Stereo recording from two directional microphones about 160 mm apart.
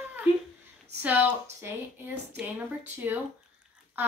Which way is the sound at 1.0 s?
10° right (ahead or behind).